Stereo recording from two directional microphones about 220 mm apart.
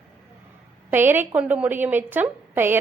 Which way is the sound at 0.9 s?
10° right (ahead or behind).